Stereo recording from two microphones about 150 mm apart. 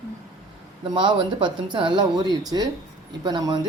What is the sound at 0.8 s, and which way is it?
Speech, 35° right (ahead or behind).